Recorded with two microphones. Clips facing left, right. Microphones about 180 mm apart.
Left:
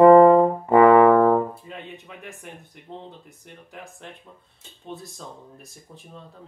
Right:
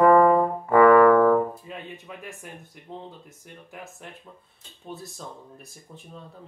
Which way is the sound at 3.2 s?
Centre (ahead or behind).